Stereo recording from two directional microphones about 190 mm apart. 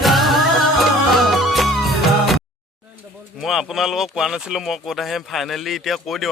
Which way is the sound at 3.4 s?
Centre (ahead or behind).